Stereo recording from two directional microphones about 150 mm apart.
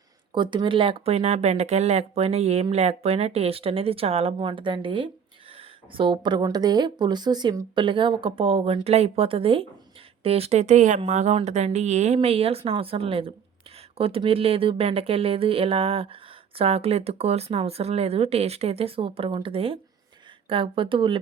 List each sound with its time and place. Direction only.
0.3 s speech: 30° right (ahead or behind)